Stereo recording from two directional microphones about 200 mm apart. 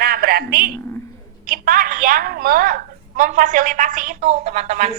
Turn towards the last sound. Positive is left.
turn(degrees=-35)  # may be behind; listen again after turning